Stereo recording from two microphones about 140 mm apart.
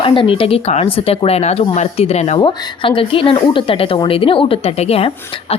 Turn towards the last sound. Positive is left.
turn(degrees=45)  # may be behind; listen again after turning